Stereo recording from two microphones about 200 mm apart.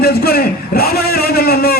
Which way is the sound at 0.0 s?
50° left (ahead or behind).